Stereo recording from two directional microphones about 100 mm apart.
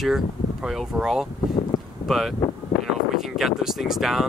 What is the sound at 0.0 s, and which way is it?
Speech, 5° right (ahead or behind).